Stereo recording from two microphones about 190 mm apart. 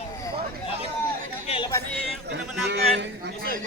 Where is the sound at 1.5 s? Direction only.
25° left (ahead or behind).